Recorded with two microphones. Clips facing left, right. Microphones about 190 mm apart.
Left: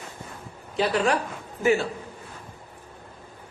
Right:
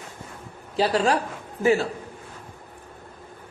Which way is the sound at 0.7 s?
35° right (ahead or behind).